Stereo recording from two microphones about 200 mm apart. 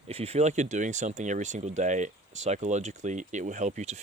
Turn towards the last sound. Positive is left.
turn(degrees=-35)  # may be behind; listen again after turning